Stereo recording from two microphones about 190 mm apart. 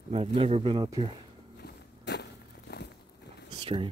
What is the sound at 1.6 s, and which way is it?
Walk, 65° left (ahead or behind).